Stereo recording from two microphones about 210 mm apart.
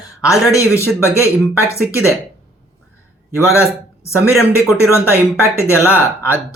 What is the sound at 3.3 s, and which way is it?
Speech, 15° left (ahead or behind).